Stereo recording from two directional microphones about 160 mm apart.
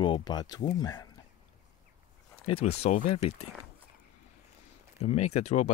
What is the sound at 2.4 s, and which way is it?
Speech, 40° left (ahead or behind).